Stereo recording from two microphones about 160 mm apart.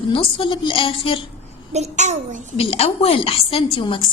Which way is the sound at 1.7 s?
45° right (ahead or behind).